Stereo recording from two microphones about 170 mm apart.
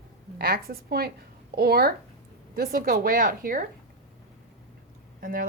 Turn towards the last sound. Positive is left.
turn(degrees=-55)  # may be behind; listen again after turning